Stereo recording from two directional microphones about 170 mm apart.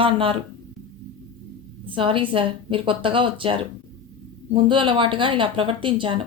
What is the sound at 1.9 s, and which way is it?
A woman's voice, 30° right (ahead or behind).